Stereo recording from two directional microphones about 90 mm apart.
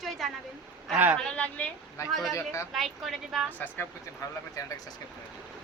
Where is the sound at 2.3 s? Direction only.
35° left (ahead or behind).